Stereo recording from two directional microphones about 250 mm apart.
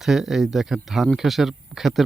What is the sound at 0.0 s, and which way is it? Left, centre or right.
Speech, centre.